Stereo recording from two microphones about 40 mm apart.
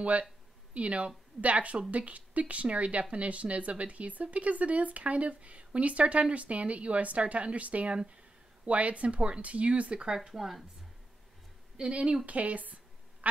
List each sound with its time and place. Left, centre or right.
0.7 s speech: right
10.1 s speech: centre
11.9 s speech: right
12.3 s a sound: right